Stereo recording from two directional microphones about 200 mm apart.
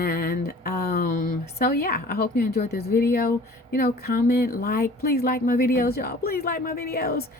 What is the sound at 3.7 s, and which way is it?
Speech, 50° left (ahead or behind).